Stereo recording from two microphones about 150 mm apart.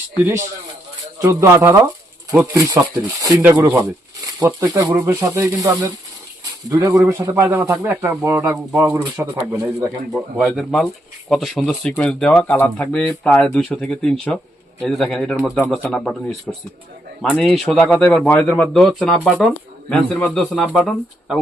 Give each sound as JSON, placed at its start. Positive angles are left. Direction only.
{"t": 1.2, "sound": "speech", "side_deg": -20}
{"t": 6.4, "sound": "a sound", "side_deg": -25}
{"t": 7.1, "sound": "speech", "side_deg": -20}
{"t": 10.1, "sound": "speech", "side_deg": 0}